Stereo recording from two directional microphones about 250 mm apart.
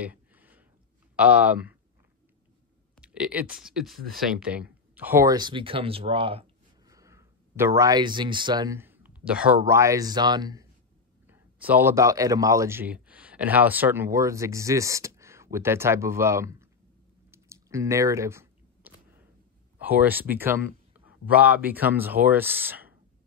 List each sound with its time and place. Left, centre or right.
0.0 s a sound: centre
1.1 s speech: centre
3.0 s clicking: centre
3.6 s speech: centre
17.3 s a sound: centre
19.8 s a man's voice: centre